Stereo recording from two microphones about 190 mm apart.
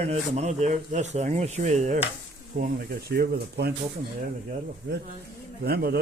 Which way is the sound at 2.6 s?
55° right (ahead or behind).